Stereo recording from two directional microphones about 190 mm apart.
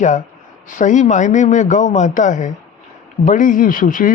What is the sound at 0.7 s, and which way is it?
A man's voice, 40° left (ahead or behind).